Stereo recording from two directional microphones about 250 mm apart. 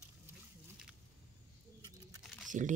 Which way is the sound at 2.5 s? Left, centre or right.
Right.